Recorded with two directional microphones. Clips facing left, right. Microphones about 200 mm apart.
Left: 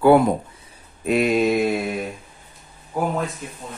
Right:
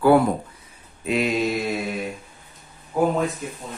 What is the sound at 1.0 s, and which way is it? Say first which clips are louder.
Mantra: left 4 dB; 50° left (ahead or behind).